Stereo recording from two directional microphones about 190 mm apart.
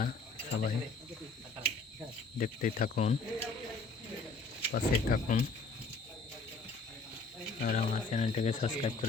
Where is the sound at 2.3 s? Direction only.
45° left (ahead or behind).